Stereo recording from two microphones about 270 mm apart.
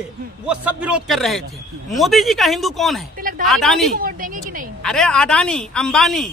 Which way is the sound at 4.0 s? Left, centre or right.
Right.